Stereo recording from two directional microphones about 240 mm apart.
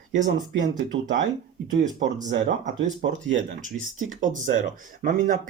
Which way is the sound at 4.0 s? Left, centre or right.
Right.